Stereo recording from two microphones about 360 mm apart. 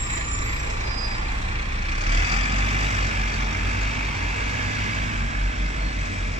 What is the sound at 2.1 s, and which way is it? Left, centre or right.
Vehicle, centre.